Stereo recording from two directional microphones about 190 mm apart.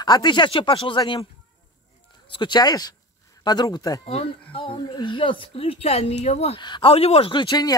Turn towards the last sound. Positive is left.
turn(degrees=20)  # may be behind; listen again after turning